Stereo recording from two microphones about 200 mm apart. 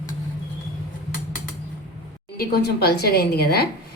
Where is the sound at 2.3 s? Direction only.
50° left (ahead or behind).